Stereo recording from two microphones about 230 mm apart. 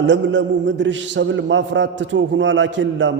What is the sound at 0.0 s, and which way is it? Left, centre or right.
A man's voice, right.